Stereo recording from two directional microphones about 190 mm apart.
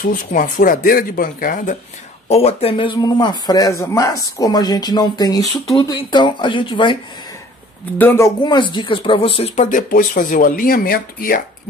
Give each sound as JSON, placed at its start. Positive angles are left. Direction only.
{"t": 0.0, "sound": "speech", "side_deg": 45}
{"t": 2.2, "sound": "speech", "side_deg": 35}
{"t": 8.0, "sound": "speech", "side_deg": 10}
{"t": 8.4, "sound": "speech", "side_deg": 25}
{"t": 9.4, "sound": "speech", "side_deg": 40}